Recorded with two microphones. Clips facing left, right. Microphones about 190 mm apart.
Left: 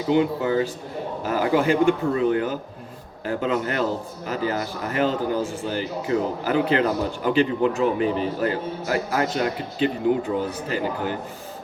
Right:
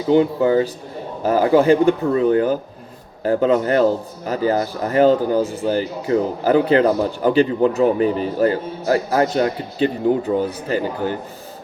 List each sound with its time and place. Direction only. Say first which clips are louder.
0.1 s a man's voice: right 6 dB; 35° right (ahead or behind)
5.4 s speech: right 6 dB; 20° right (ahead or behind)
5.6 s a man's voice: right 6 dB; 40° right (ahead or behind)